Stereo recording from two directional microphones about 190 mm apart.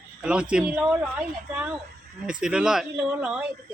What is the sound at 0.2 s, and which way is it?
Speech, 5° right (ahead or behind).